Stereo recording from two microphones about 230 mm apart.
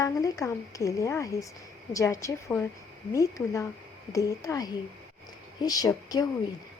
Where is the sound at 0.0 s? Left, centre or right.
Centre.